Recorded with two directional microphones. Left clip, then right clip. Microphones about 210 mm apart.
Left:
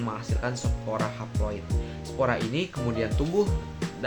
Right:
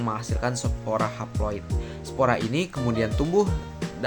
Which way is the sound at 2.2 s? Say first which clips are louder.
Right 3 dB; 35° right (ahead or behind).